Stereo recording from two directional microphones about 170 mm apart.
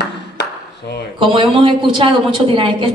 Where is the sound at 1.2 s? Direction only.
30° right (ahead or behind).